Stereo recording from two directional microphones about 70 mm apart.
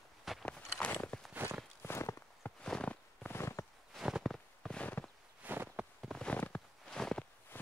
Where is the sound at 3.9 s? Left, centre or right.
Centre.